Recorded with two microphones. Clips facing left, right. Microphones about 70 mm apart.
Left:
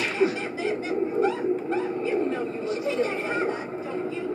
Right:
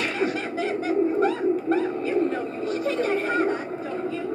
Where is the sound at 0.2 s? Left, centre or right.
Right.